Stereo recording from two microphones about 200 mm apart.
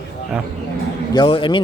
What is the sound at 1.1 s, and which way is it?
Speech, 25° left (ahead or behind).